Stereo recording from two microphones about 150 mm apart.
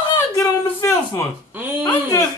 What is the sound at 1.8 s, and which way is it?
Speech, 20° left (ahead or behind).